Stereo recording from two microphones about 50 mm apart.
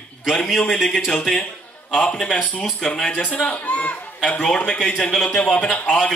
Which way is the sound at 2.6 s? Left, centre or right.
Centre.